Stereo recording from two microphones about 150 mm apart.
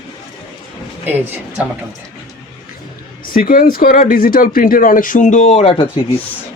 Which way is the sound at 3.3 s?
70° left (ahead or behind).